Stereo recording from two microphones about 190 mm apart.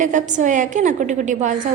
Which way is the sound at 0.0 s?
40° right (ahead or behind).